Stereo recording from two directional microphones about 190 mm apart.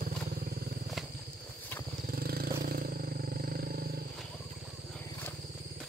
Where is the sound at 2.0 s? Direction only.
50° right (ahead or behind).